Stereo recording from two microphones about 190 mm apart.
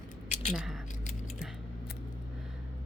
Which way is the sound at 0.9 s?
40° left (ahead or behind).